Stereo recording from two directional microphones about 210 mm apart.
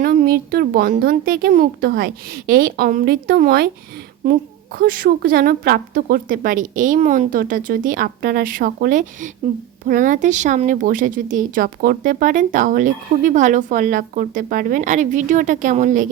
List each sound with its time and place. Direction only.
0.0 s a woman's voice: 40° right (ahead or behind)
4.8 s a woman's voice: 40° right (ahead or behind)